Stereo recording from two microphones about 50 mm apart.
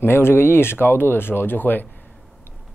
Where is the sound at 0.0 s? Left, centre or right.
Left.